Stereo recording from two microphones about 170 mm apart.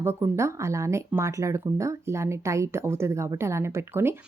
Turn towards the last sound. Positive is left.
turn(degrees=-15)  # may be behind; listen again after turning